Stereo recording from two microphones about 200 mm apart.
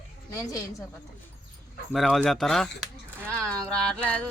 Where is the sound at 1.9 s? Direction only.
Centre (ahead or behind).